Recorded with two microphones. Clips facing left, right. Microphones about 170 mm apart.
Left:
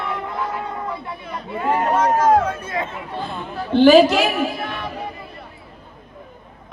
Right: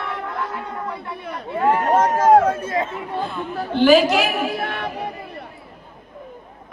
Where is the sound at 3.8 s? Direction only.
30° left (ahead or behind).